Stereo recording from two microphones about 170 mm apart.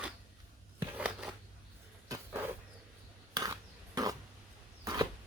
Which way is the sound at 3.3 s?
20° right (ahead or behind).